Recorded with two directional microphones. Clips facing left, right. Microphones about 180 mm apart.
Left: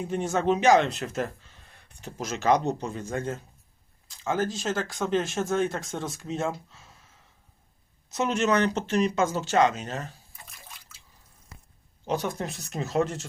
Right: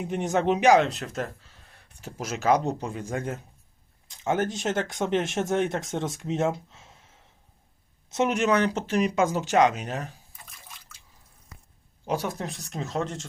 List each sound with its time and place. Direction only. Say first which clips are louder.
0.0 s speech: right 1 dB; 20° right (ahead or behind)
0.9 s speech: left 1 dB; centre (ahead or behind); by 6.9 s 20° right (ahead or behind)
8.1 s speech: right 1 dB; 20° right (ahead or behind)
12.0 s speech: even; 10° right (ahead or behind)